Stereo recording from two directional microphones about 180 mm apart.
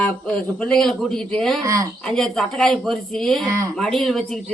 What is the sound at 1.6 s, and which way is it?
Speech, 20° right (ahead or behind).